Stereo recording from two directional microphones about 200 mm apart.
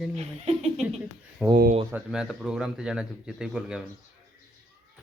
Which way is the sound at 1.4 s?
10° right (ahead or behind).